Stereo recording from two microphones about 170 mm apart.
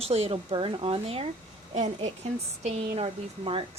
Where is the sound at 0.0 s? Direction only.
35° right (ahead or behind).